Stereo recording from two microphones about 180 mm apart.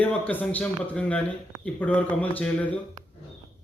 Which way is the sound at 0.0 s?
10° left (ahead or behind).